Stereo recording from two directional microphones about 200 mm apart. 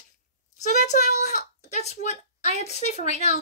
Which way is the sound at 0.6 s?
35° left (ahead or behind).